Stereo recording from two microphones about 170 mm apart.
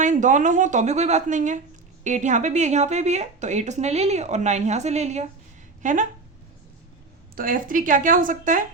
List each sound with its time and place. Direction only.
0.0 s a woman's voice: 45° right (ahead or behind)
7.3 s a woman's voice: 55° right (ahead or behind)